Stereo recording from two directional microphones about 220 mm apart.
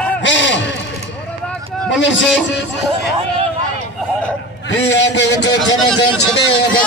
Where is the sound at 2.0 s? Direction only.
55° left (ahead or behind).